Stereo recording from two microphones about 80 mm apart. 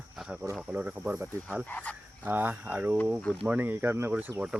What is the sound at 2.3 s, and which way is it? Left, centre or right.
Speech, right.